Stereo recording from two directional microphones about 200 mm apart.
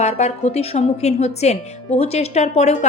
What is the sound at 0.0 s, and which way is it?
Speech, 35° left (ahead or behind).